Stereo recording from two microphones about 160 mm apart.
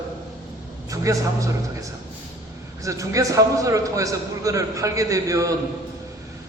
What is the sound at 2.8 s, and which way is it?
A man's voice, 20° right (ahead or behind).